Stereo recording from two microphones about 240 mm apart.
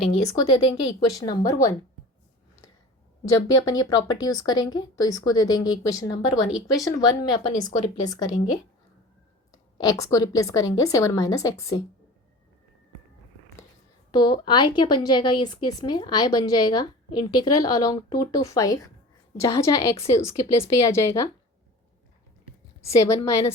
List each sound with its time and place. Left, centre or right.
0.3 s a woman's voice: centre
3.2 s a woman's voice: centre
9.7 s a woman's voice: centre
14.1 s a woman's voice: centre
23.0 s a woman's voice: centre